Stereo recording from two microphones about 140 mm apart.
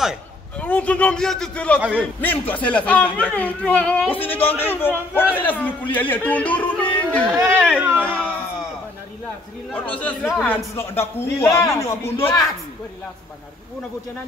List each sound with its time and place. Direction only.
0.6 s speech: 10° left (ahead or behind)
7.2 s speech: 15° right (ahead or behind)
9.7 s speech: 10° left (ahead or behind)